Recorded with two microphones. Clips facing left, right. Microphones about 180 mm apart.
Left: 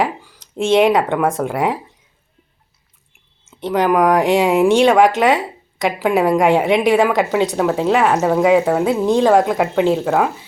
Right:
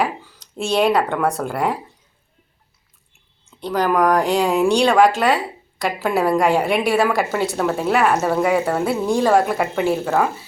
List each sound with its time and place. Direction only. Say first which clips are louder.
0.0 s speech: left 2 dB; 15° left (ahead or behind)
3.5 s a woman's voice: left 3 dB; 20° left (ahead or behind)